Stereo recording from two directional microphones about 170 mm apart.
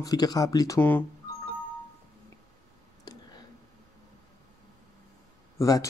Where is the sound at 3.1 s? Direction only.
25° left (ahead or behind).